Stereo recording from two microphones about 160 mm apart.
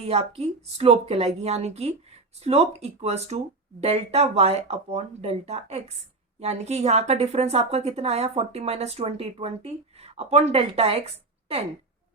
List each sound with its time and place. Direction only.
0.0 s a woman's voice: 40° right (ahead or behind)